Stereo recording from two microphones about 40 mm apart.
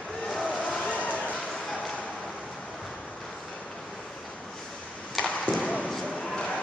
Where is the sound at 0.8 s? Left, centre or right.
Left.